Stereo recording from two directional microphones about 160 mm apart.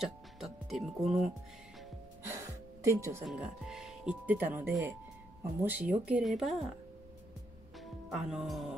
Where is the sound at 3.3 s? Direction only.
5° right (ahead or behind).